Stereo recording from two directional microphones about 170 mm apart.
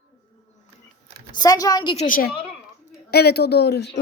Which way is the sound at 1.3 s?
20° left (ahead or behind).